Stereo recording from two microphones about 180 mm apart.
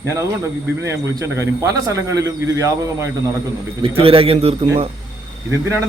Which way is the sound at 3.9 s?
30° right (ahead or behind).